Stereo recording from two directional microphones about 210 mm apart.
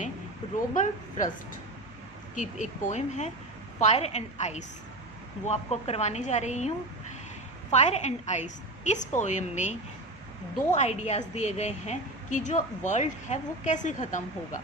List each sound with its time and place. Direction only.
0.7 s a woman's voice: 35° left (ahead or behind)
2.3 s a woman's voice: 35° left (ahead or behind)